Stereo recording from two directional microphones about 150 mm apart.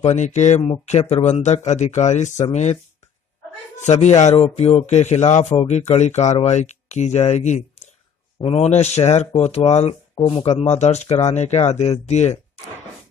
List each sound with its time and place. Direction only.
0.0 s a man's voice: 50° left (ahead or behind)
3.8 s a man's voice: 45° left (ahead or behind)
10.1 s a man's voice: 35° left (ahead or behind)